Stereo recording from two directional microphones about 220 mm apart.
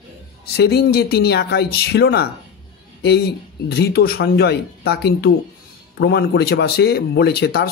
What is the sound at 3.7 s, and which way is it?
Speech, 45° left (ahead or behind).